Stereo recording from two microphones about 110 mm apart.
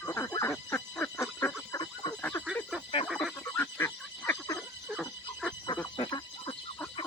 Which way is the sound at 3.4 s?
25° left (ahead or behind).